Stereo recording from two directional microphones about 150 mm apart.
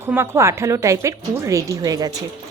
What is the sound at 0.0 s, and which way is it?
A woman's voice, 15° right (ahead or behind).